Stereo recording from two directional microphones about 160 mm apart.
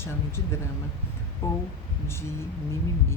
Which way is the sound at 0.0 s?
15° left (ahead or behind).